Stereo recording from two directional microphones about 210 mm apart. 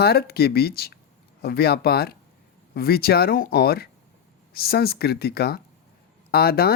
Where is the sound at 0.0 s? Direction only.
50° left (ahead or behind).